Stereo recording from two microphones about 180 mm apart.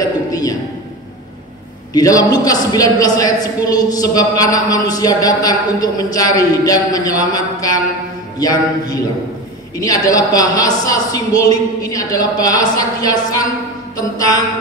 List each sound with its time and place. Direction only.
0.3 s a man's voice: 20° left (ahead or behind)
2.0 s a woman's voice: 20° left (ahead or behind)